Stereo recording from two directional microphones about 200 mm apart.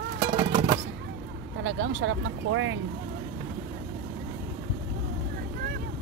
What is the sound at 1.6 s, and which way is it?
Speech, 75° right (ahead or behind).